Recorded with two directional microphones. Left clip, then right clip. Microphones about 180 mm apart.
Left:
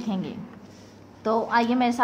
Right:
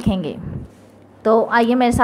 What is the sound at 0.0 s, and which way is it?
A woman's voice, 35° right (ahead or behind).